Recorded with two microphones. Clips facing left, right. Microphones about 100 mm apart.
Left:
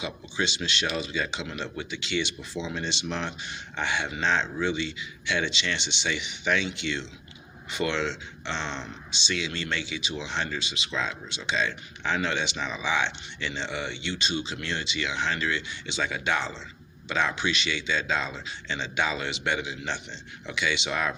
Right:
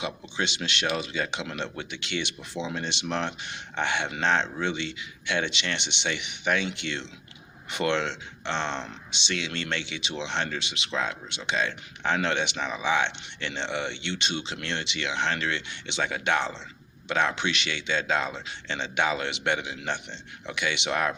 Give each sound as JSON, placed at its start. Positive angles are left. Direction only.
{"t": 0.0, "sound": "speech", "side_deg": -55}